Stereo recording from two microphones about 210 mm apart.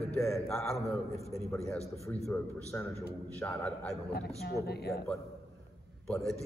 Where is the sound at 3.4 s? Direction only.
10° left (ahead or behind).